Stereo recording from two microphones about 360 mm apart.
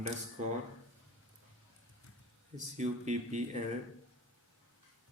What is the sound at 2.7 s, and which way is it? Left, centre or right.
Speech, centre.